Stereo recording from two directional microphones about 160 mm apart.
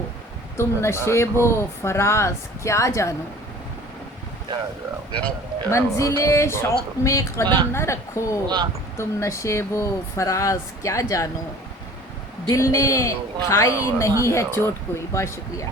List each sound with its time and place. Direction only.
0.5 s speech: 15° left (ahead or behind)
5.7 s speech: 20° left (ahead or behind)
7.4 s a woman's voice: 30° right (ahead or behind)
7.7 s speech: 15° left (ahead or behind)
12.5 s speech: 20° left (ahead or behind)